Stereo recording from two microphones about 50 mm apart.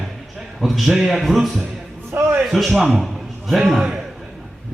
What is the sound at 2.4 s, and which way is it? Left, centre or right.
A man's voice, centre.